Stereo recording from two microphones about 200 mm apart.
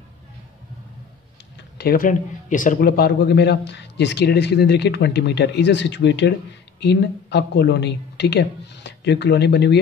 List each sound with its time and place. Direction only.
1.8 s speech: 45° left (ahead or behind)